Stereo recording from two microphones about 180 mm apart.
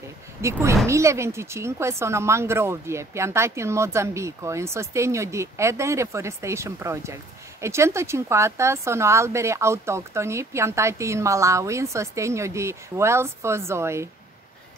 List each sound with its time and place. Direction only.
0.4 s a woman's voice: 15° right (ahead or behind)